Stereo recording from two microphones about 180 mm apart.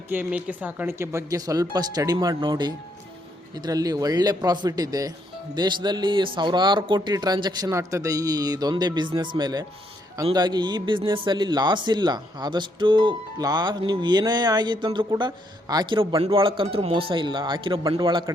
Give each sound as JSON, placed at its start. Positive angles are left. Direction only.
{"t": 0.1, "sound": "a man's voice", "side_deg": -10}